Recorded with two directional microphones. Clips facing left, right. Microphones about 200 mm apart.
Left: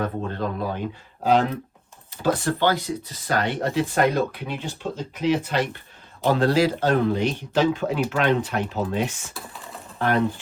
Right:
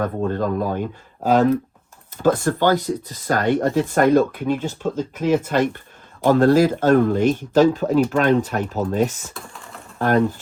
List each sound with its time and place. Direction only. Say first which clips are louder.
0.0 s speech: right 5 dB; 45° right (ahead or behind)
9.3 s typing: right 1 dB; centre (ahead or behind)